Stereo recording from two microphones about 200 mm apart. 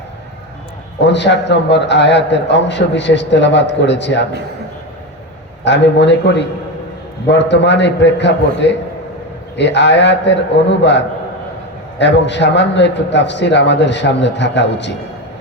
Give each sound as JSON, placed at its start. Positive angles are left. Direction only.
{"t": 1.0, "sound": "a man's voice", "side_deg": 60}
{"t": 5.6, "sound": "a man's voice", "side_deg": 60}